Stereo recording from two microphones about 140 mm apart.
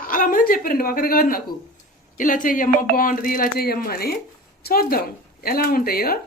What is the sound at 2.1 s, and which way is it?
Speech, 75° left (ahead or behind).